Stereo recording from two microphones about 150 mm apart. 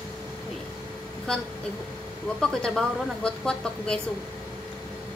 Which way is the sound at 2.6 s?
5° left (ahead or behind).